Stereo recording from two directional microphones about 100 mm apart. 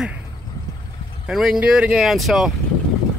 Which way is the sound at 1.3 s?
5° right (ahead or behind).